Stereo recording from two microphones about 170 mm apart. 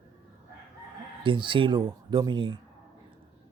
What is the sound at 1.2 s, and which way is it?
Speech, 30° right (ahead or behind).